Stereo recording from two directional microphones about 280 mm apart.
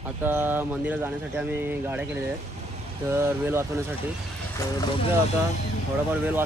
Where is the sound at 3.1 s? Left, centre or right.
Centre.